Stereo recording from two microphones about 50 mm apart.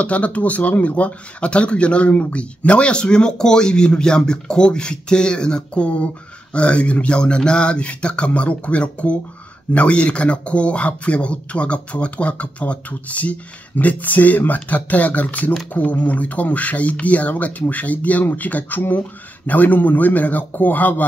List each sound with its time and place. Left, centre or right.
0.0 s speech: left